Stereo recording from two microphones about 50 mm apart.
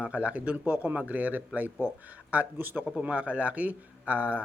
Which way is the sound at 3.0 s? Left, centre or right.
Right.